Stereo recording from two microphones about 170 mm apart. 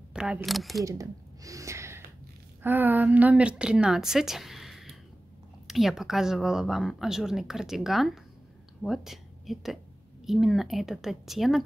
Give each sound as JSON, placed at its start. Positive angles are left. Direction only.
{"t": 0.1, "sound": "speech", "side_deg": -5}
{"t": 0.8, "sound": "a sound", "side_deg": -20}
{"t": 2.6, "sound": "a woman's voice", "side_deg": -10}